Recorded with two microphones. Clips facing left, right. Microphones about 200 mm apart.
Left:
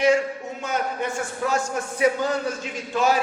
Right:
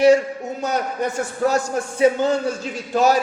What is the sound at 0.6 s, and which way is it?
Speech, 40° right (ahead or behind).